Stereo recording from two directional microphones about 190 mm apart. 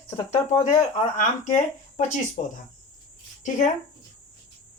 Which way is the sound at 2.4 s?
40° left (ahead or behind).